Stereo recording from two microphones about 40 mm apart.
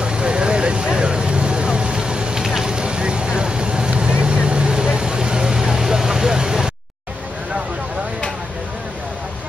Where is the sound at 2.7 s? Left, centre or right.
Right.